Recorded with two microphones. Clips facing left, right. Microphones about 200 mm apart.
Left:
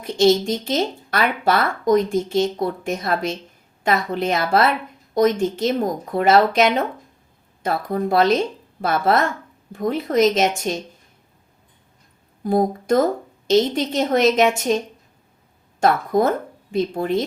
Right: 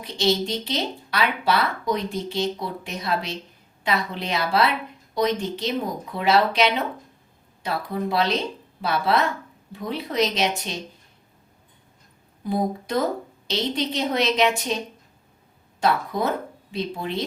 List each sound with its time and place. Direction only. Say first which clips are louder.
0.0 s speech: left 7 dB; 45° left (ahead or behind)
12.4 s speech: left 6 dB; 50° left (ahead or behind)
15.8 s speech: left 6 dB; 50° left (ahead or behind)